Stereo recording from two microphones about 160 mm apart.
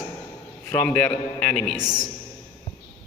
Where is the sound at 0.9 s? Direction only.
5° left (ahead or behind).